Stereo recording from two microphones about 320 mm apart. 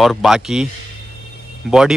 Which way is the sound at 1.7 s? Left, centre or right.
Centre.